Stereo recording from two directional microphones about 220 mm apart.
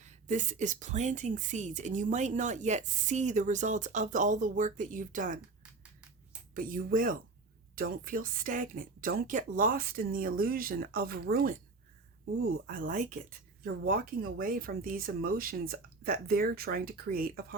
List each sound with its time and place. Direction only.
0.0 s a woman's voice: 35° right (ahead or behind)
5.6 s a sound: 5° right (ahead or behind)
6.5 s a woman's voice: 40° right (ahead or behind)
12.6 s a woman's voice: 40° right (ahead or behind)